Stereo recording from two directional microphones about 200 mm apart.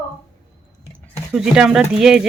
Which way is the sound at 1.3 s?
5° right (ahead or behind).